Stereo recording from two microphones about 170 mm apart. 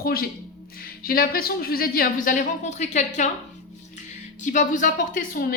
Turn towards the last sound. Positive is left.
turn(degrees=55)  # may be behind; listen again after turning